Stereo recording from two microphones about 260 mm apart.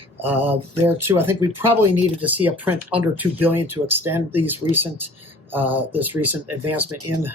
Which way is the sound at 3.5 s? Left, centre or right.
Right.